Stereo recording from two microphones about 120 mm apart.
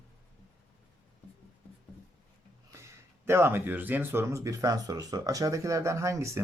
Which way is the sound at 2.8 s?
20° right (ahead or behind).